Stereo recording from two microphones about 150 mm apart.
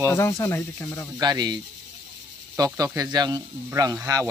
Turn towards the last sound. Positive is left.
turn(degrees=-25)  # may be behind; listen again after turning